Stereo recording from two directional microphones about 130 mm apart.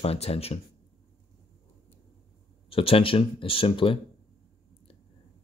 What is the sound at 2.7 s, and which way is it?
Speech, 45° left (ahead or behind).